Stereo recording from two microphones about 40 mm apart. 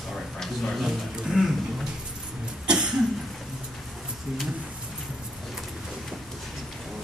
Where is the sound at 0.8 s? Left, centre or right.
Centre.